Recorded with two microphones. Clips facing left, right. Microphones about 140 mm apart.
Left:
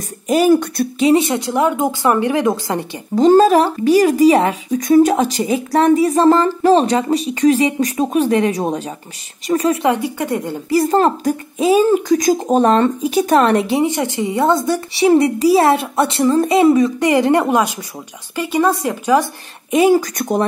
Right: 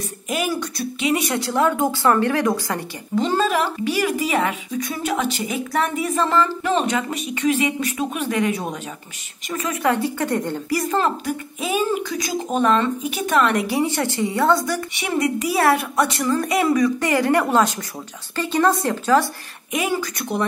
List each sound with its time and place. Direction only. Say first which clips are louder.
0.3 s a woman's voice: left 12 dB; 40° left (ahead or behind); by 2.8 s 20° left (ahead or behind)
3.2 s a woman's voice: left 10 dB; 40° left (ahead or behind)
9.8 s speech: left 3 dB; 15° left (ahead or behind)
10.7 s a woman's voice: left 8 dB; 30° left (ahead or behind)
13.7 s a woman's voice: left 4 dB; 20° left (ahead or behind)
15.0 s a woman's voice: left 11 dB; 30° left (ahead or behind); by 19.2 s 15° left (ahead or behind)
19.7 s a woman's voice: left 11 dB; 35° left (ahead or behind)